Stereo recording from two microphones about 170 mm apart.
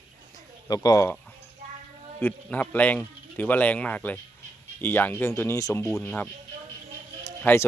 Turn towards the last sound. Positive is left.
turn(degrees=15)  # may be behind; listen again after turning